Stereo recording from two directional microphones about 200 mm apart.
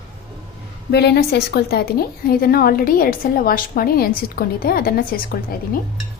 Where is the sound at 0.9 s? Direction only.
55° left (ahead or behind).